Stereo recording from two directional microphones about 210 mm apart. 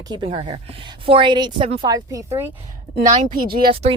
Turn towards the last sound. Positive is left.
turn(degrees=-25)  # may be behind; listen again after turning